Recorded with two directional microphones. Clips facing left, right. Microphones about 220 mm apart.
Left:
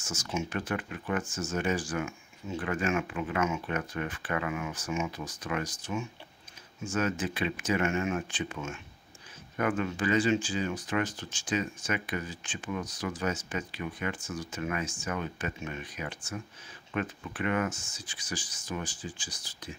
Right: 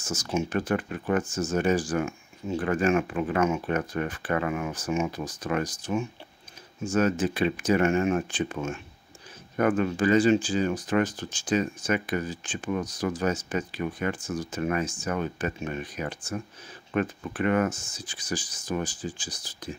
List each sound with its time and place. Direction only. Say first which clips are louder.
0.0 s speech: right 6 dB; 35° right (ahead or behind)
9.6 s speech: right 6 dB; 45° right (ahead or behind)